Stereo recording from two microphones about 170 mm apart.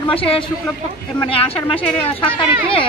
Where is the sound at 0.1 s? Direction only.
35° left (ahead or behind).